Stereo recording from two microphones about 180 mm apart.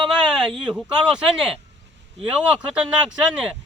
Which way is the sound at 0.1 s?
5° right (ahead or behind).